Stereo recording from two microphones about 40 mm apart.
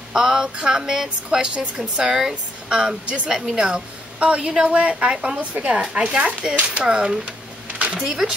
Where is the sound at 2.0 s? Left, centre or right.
Centre.